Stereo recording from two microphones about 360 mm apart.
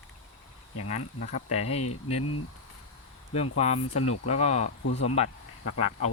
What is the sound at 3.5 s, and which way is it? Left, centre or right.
Speech, centre.